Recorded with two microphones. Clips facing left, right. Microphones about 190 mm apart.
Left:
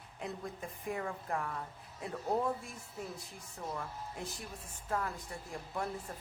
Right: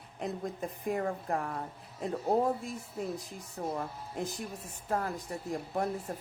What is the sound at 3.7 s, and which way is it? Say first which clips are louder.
Speech: right 5 dB; 40° right (ahead or behind).